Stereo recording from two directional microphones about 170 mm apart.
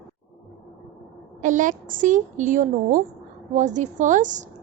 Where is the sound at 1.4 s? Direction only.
50° right (ahead or behind).